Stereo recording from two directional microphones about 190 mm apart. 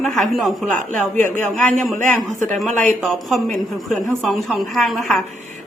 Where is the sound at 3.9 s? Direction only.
5° left (ahead or behind).